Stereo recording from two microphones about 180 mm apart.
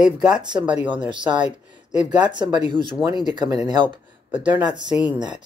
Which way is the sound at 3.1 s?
25° right (ahead or behind).